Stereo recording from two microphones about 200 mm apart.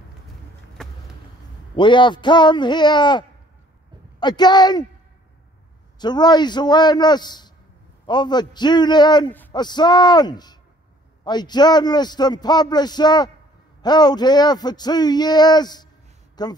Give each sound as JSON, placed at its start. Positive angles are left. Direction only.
{"t": 0.8, "sound": "a sound", "side_deg": 5}
{"t": 1.8, "sound": "a man's voice", "side_deg": 25}
{"t": 5.9, "sound": "a man's voice", "side_deg": 20}